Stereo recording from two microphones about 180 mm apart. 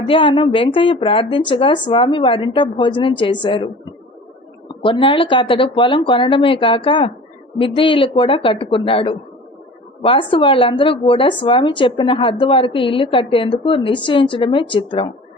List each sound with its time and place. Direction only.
0.1 s speech: 30° left (ahead or behind)
4.8 s speech: 30° left (ahead or behind)